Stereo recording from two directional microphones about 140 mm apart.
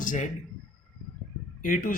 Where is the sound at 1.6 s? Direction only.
85° left.